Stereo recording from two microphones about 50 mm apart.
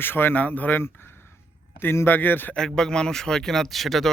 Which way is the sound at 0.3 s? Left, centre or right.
Left.